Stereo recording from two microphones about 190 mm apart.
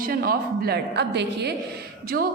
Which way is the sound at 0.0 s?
50° right (ahead or behind).